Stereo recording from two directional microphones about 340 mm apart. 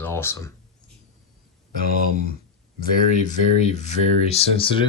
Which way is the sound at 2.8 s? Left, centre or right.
Left.